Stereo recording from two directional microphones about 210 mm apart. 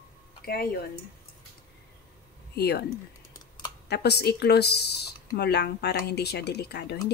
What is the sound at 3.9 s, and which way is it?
Speech, 50° left (ahead or behind).